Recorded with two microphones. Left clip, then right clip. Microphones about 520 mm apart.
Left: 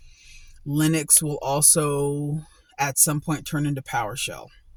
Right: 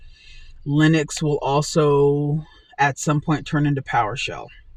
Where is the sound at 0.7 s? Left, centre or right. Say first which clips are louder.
Right 4 dB; left.